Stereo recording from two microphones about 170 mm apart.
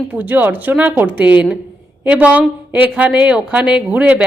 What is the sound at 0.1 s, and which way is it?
A woman's voice, 10° right (ahead or behind).